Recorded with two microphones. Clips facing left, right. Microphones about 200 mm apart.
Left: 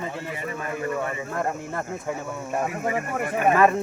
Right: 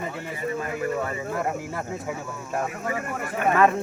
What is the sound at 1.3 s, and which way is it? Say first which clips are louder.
Speech: left 1 dB; 5° right (ahead or behind).